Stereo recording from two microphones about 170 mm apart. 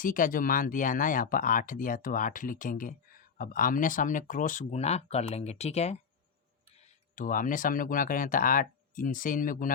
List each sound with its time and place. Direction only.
0.0 s speech: 55° left (ahead or behind)
6.8 s speech: 50° left (ahead or behind)